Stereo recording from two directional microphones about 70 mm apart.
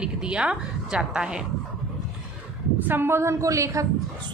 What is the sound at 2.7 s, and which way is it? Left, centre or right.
A woman's voice, right.